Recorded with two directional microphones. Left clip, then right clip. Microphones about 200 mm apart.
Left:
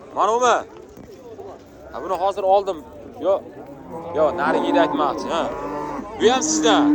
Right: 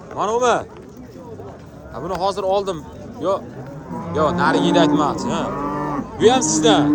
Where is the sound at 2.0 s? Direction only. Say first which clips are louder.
Even; 5° right (ahead or behind).